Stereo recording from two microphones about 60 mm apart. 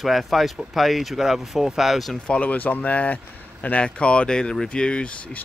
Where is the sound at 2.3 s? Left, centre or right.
Left.